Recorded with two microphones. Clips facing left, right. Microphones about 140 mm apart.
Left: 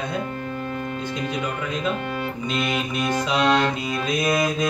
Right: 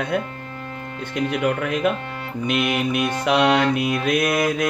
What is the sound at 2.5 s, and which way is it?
Mantra, 65° right (ahead or behind).